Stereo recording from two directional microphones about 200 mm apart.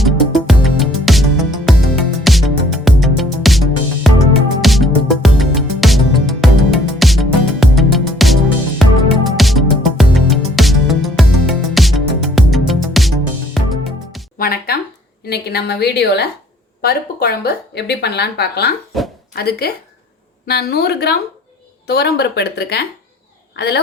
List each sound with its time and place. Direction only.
0.0 s music: centre (ahead or behind)
14.3 s music: 50° left (ahead or behind)
15.3 s a woman's voice: 55° left (ahead or behind)
18.9 s speech: centre (ahead or behind)
19.4 s speech: 50° left (ahead or behind)